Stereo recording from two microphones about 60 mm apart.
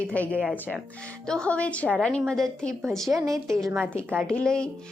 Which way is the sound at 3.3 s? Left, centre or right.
Right.